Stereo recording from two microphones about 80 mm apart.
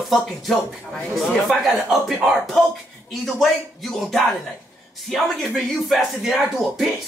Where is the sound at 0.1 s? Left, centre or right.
Centre.